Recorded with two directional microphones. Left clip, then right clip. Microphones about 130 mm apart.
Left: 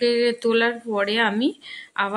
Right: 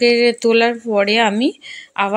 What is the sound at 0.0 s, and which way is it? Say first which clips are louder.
Speech: right 7 dB; 35° right (ahead or behind).